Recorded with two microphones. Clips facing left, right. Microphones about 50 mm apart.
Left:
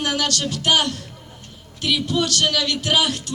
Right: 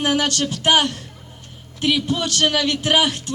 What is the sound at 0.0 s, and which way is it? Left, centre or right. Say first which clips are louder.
Speech: right 3 dB; right.